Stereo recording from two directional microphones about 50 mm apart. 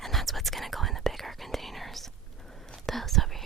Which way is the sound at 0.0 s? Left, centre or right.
Centre.